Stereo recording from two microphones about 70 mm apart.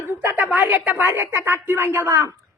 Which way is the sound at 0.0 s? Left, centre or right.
Right.